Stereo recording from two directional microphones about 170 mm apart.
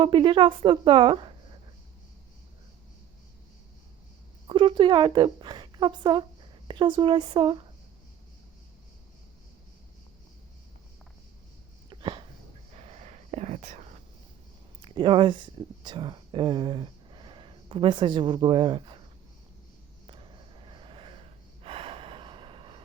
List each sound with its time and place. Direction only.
0.0 s a woman's voice: 30° right (ahead or behind)
4.4 s speech: 30° right (ahead or behind)
11.9 s a sound: 30° right (ahead or behind)
12.7 s whispering: 40° right (ahead or behind)
14.8 s speech: 30° right (ahead or behind)
20.1 s gasp: 30° right (ahead or behind)